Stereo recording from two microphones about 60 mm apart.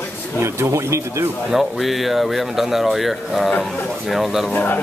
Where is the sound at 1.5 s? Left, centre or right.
Centre.